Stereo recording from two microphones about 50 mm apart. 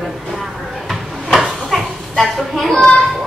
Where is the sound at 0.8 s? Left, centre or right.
Centre.